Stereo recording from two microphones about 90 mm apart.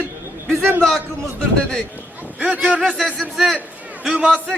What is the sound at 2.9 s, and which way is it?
Speech, 5° left (ahead or behind).